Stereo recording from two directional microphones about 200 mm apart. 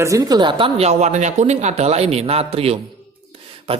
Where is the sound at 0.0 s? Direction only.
15° right (ahead or behind).